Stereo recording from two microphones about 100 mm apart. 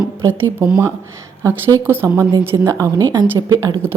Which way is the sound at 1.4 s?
25° right (ahead or behind).